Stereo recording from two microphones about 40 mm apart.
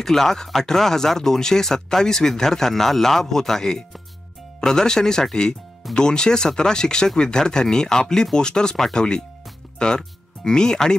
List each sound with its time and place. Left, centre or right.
0.0 s speech: centre